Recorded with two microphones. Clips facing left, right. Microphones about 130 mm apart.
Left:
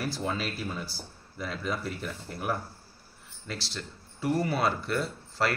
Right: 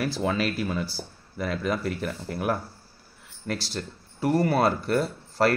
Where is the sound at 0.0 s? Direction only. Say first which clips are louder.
Right 6 dB; 85° right; by 2.5 s 70° right (ahead or behind).